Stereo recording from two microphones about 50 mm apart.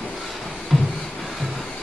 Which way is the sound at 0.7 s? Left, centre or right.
Centre.